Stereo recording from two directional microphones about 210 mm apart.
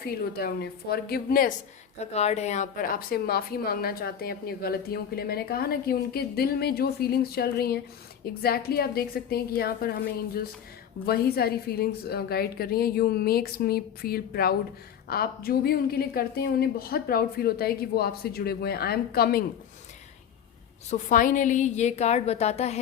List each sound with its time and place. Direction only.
0.0 s a woman's voice: 45° left (ahead or behind)
2.0 s a woman's voice: 30° left (ahead or behind); by 19.5 s 45° left (ahead or behind)
20.9 s a woman's voice: 40° left (ahead or behind)